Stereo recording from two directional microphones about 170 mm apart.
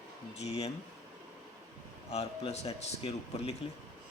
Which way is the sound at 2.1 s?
35° left (ahead or behind).